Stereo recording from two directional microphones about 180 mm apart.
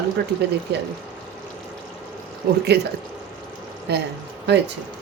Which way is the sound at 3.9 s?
65° right (ahead or behind).